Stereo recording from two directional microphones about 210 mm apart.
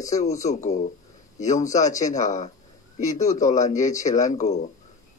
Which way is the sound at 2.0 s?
35° left (ahead or behind).